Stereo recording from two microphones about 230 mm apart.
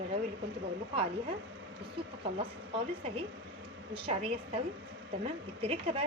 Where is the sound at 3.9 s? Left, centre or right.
Right.